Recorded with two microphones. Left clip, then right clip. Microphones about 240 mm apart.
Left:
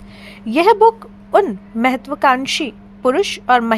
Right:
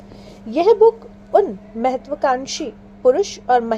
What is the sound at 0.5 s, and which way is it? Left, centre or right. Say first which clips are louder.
A woman's voice: left 2 dB; left.